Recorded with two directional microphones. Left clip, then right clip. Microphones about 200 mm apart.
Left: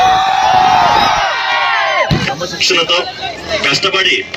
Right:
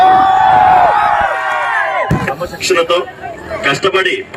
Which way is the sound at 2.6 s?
60° right (ahead or behind).